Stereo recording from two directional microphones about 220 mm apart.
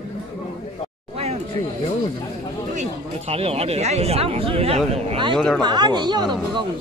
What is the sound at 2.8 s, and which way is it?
Speech, 30° right (ahead or behind).